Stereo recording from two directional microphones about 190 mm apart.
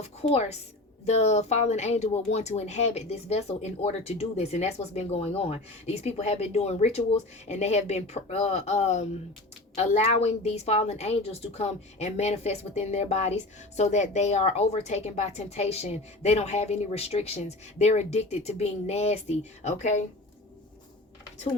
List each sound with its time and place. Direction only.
0.0 s a woman's voice: 35° left (ahead or behind)